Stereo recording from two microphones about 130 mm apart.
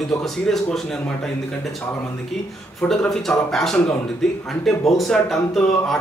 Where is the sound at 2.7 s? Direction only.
5° left (ahead or behind).